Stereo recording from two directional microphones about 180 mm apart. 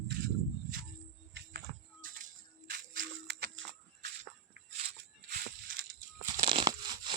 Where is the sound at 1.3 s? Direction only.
80° right.